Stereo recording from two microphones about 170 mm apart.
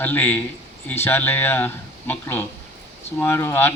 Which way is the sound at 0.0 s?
10° left (ahead or behind).